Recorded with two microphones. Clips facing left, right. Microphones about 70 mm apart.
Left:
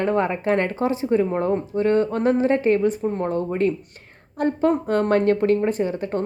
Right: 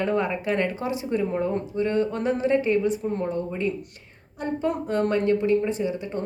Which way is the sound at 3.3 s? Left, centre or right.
Left.